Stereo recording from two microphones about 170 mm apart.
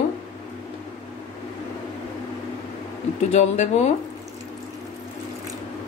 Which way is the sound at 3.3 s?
40° left (ahead or behind).